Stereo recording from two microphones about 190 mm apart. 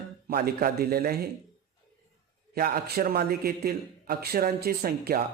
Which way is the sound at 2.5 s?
55° right (ahead or behind).